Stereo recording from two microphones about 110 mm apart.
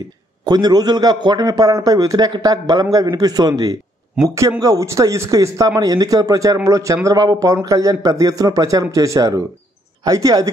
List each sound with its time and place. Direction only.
0.5 s a man's voice: 40° right (ahead or behind)